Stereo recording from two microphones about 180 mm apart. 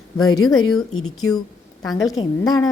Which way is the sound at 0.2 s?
20° left (ahead or behind).